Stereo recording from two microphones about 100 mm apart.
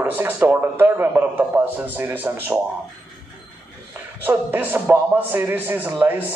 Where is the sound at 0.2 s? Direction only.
15° right (ahead or behind).